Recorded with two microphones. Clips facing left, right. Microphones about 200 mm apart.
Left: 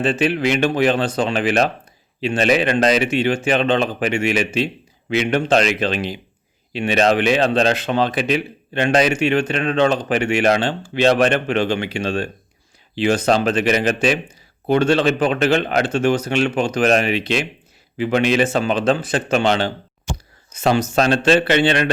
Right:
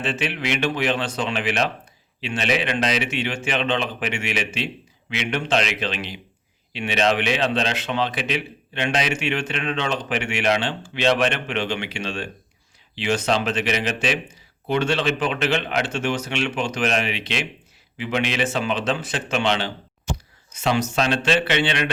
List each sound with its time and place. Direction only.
0.0 s a man's voice: 40° left (ahead or behind)